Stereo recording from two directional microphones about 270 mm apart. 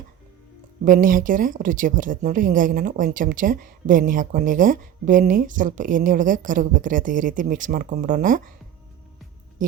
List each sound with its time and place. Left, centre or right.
0.9 s speech: right
9.6 s speech: right